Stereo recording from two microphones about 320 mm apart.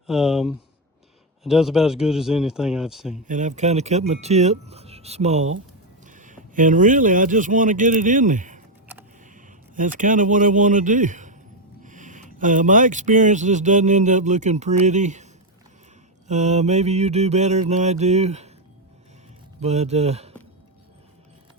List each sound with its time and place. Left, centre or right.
0.1 s speech: centre
3.2 s mantra: right
6.1 s speech: right
16.2 s mantra: right
19.5 s speech: centre